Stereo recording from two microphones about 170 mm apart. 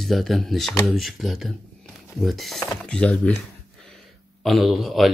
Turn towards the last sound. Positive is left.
turn(degrees=0)  # may be behind; listen again after turning